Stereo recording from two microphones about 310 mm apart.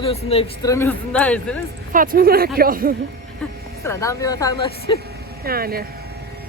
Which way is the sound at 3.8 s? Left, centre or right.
Centre.